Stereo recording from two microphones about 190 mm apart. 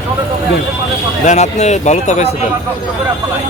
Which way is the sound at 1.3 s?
35° left (ahead or behind).